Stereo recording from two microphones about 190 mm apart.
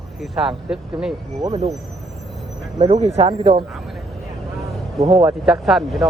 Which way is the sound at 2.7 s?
30° right (ahead or behind).